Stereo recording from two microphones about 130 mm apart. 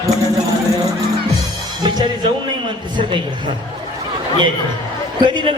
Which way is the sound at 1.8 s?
35° right (ahead or behind).